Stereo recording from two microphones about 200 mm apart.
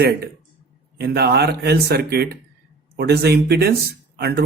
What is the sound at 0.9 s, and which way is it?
Speech, 55° right (ahead or behind).